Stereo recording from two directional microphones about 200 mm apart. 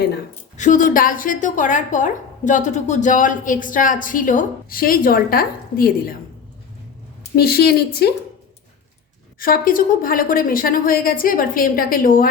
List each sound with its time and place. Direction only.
0.5 s a woman's voice: 40° left (ahead or behind)
7.3 s a woman's voice: 50° left (ahead or behind)
9.4 s a woman's voice: 45° left (ahead or behind)